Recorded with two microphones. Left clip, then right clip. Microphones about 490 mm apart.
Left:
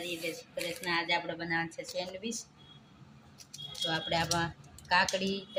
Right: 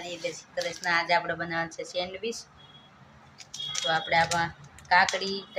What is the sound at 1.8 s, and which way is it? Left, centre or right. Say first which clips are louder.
Speech: right 6 dB; left.